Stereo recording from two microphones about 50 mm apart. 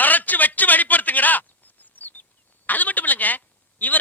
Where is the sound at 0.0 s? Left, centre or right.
Left.